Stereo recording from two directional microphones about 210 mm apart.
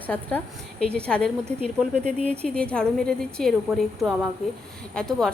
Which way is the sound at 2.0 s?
30° right (ahead or behind).